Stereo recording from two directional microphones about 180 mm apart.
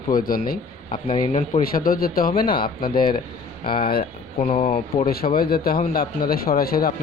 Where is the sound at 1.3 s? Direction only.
30° left (ahead or behind).